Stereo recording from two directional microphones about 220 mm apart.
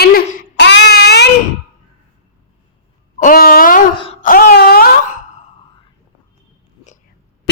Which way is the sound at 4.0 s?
25° left (ahead or behind).